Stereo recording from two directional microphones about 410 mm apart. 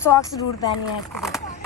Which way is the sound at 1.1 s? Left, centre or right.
Centre.